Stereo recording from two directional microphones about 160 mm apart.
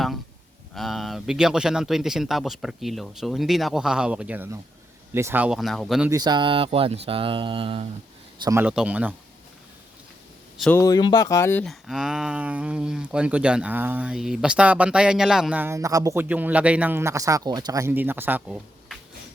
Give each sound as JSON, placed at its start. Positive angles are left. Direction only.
{"t": 0.8, "sound": "speech", "side_deg": 0}
{"t": 6.1, "sound": "speech", "side_deg": -25}
{"t": 8.4, "sound": "speech", "side_deg": -15}
{"t": 10.8, "sound": "speech", "side_deg": 25}
{"t": 11.6, "sound": "speech", "side_deg": 0}